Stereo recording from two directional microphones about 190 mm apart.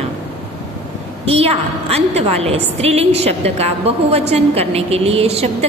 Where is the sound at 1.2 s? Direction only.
30° right (ahead or behind).